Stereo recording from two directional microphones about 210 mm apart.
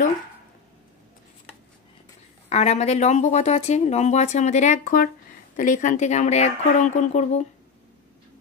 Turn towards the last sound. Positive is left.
turn(degrees=35)  # may be behind; listen again after turning